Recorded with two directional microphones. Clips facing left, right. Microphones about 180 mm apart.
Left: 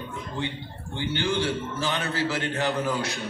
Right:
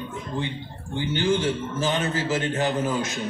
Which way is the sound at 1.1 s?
15° right (ahead or behind).